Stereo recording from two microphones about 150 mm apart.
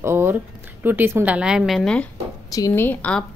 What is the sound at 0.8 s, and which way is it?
A woman's voice, 15° right (ahead or behind).